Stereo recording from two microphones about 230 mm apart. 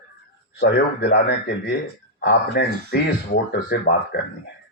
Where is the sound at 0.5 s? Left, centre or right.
Left.